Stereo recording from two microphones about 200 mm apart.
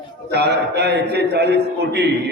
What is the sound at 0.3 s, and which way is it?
A man's voice, 55° right (ahead or behind).